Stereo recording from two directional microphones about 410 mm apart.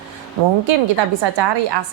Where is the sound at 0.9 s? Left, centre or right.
Right.